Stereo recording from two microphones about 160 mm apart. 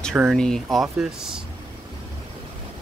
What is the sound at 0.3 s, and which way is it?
Speech, centre (ahead or behind).